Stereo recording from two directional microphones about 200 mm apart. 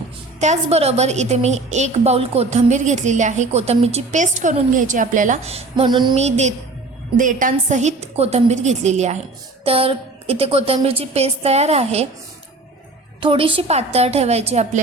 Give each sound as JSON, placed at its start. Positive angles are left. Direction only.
{"t": 0.3, "sound": "a woman's voice", "side_deg": -35}
{"t": 6.1, "sound": "a woman's voice", "side_deg": -35}
{"t": 13.1, "sound": "a woman's voice", "side_deg": -25}